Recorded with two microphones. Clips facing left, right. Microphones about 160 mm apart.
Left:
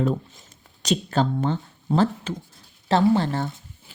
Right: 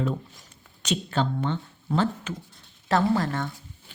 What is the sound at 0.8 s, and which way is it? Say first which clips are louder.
A woman's voice: left 4 dB; 40° left (ahead or behind).